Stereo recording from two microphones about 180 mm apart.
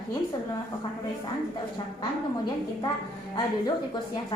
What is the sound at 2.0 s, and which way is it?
A woman's voice, 25° left (ahead or behind).